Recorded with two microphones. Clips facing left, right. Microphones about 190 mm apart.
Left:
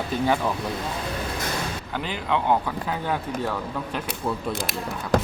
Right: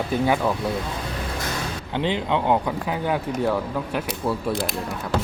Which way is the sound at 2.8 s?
10° right (ahead or behind).